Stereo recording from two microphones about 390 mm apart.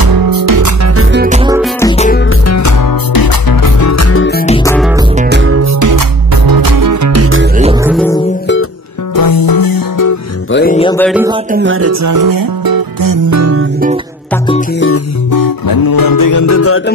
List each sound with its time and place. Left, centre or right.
0.0 s music: right
0.9 s music: right
1.6 s music: centre
2.2 s music: left
4.6 s music: centre
4.9 s music: centre; by 7.4 s right
7.5 s music: centre
7.9 s music: centre
9.1 s music: left
10.5 s music: left; by 11.2 s centre
11.5 s music: right
15.3 s music: left